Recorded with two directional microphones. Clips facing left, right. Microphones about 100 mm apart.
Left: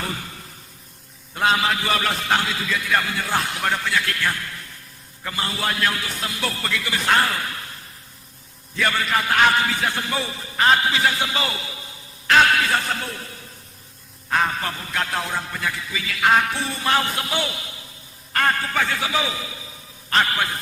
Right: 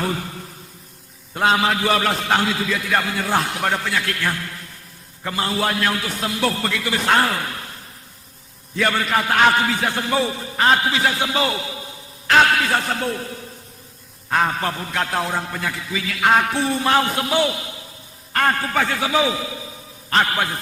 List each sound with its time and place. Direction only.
1.4 s a man's voice: 35° right (ahead or behind)
8.8 s a man's voice: 45° right (ahead or behind)
14.3 s a man's voice: 40° right (ahead or behind)